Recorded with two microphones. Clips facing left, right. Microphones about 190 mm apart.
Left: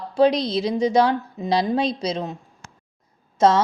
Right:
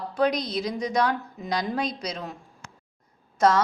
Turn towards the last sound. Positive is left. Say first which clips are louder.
# left 4 dB
turn(degrees=25)  # may be behind; listen again after turning